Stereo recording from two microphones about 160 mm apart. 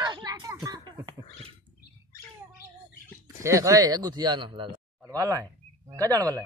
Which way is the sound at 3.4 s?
20° right (ahead or behind).